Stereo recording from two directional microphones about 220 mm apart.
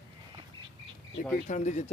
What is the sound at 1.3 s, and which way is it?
Speech, 35° left (ahead or behind).